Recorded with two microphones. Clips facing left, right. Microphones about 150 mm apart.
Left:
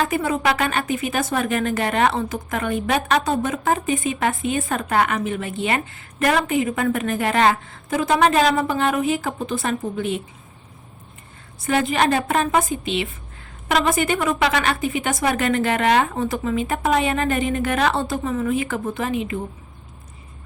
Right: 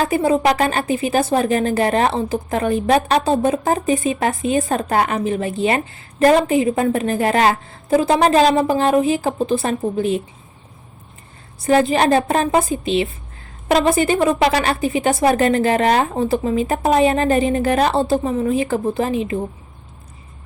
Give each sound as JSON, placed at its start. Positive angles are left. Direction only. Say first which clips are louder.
{"t": 0.0, "sound": "a woman's voice", "louder": "right 5 dB", "side_deg": -35}
{"t": 11.6, "sound": "a woman's voice", "louder": "right 5 dB", "side_deg": -35}